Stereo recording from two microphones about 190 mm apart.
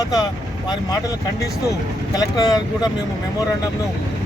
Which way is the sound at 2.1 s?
20° left (ahead or behind).